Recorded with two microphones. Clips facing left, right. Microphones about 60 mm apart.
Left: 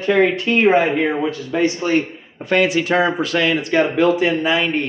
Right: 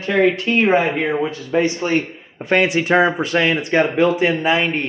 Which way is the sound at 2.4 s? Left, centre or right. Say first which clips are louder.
Even; right.